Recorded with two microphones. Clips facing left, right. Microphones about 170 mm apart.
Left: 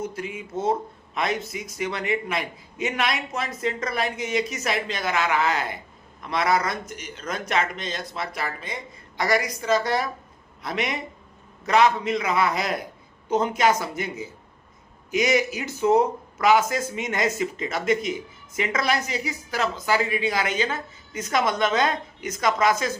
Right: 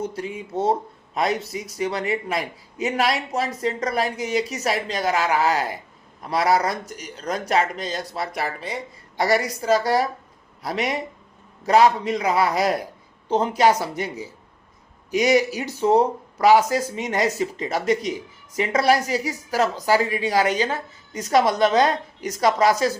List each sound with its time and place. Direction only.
0.0 s speech: 35° right (ahead or behind)